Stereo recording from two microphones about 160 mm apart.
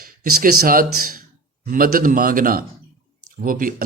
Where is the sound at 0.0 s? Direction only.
65° right (ahead or behind).